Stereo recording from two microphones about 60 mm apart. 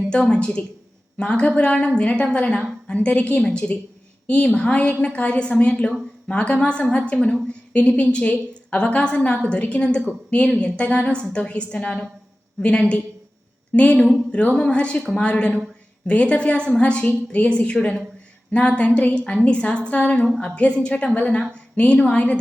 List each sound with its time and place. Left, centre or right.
0.1 s a woman's voice: centre
19.0 s a woman's voice: centre